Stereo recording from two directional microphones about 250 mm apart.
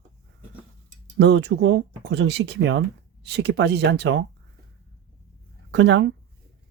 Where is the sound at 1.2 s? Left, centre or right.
Right.